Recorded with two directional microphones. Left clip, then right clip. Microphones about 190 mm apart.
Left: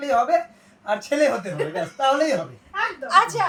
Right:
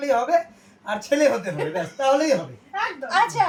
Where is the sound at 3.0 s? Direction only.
45° left (ahead or behind).